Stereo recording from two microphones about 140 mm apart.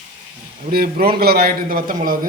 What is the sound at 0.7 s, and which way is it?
A man's voice, 90° right.